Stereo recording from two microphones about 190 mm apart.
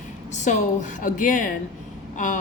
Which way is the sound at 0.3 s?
40° left (ahead or behind).